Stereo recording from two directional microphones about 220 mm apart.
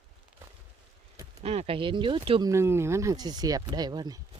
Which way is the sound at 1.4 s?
30° right (ahead or behind).